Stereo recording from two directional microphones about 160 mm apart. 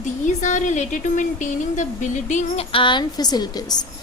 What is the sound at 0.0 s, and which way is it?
Speech, 50° left (ahead or behind).